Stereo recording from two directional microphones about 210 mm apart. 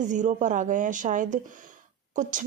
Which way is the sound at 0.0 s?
35° right (ahead or behind).